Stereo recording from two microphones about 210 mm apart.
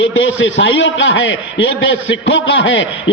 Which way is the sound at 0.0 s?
65° left (ahead or behind).